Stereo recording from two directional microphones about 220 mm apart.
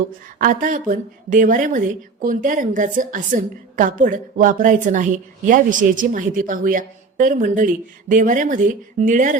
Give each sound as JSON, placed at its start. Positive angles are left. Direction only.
{"t": 0.3, "sound": "a woman's voice", "side_deg": -35}